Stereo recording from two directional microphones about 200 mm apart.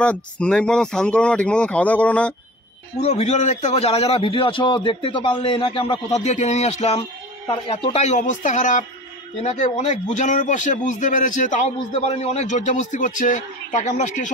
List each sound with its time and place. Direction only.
0.0 s speech: 5° left (ahead or behind)
3.0 s a man's voice: 35° left (ahead or behind)